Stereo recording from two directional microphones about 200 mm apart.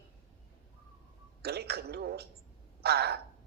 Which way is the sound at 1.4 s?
55° right (ahead or behind).